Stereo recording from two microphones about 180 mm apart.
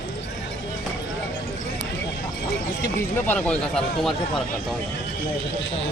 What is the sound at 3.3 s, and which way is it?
Speech, 5° left (ahead or behind).